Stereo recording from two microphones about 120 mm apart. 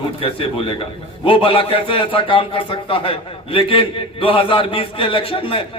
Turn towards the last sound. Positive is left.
turn(degrees=50)  # may be behind; listen again after turning